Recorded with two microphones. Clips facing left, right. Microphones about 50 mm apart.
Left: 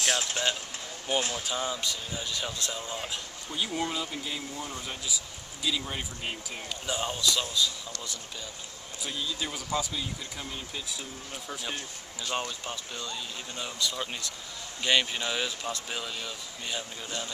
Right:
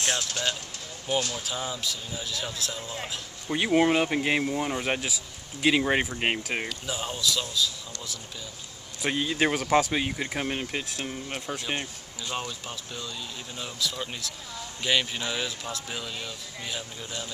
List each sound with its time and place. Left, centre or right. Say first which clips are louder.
0.2 s speech: even; centre
1.3 s speech: left 1 dB; centre
3.5 s speech: right 10 dB; right
6.9 s speech: left 2 dB; centre
9.0 s speech: right 9 dB; right
12.3 s speech: left 1 dB; centre